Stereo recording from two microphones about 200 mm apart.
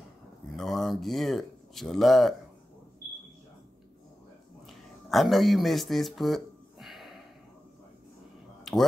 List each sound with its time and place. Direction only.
0.6 s speech: centre (ahead or behind)
4.6 s a sound: centre (ahead or behind)
8.7 s music: centre (ahead or behind)